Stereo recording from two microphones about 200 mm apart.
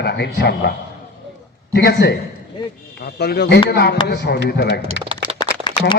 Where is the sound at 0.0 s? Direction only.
55° left (ahead or behind).